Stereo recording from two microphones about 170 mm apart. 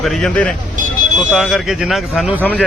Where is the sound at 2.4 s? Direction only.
10° left (ahead or behind).